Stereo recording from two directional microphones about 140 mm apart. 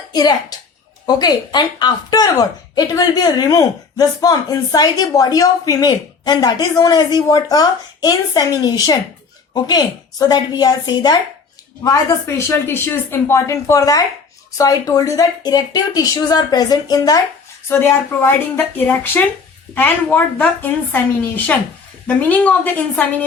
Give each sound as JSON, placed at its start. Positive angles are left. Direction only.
{"t": 0.1, "sound": "a child's voice", "side_deg": 30}
{"t": 17.7, "sound": "a woman's voice", "side_deg": 15}